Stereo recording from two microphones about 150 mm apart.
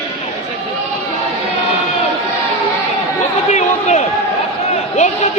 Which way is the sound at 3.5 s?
50° left (ahead or behind).